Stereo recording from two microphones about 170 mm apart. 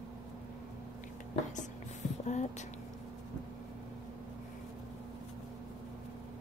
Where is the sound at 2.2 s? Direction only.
45° left (ahead or behind).